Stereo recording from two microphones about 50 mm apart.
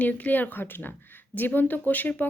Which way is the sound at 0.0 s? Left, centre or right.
Left.